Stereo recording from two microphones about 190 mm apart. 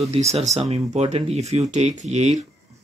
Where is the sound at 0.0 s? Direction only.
35° right (ahead or behind).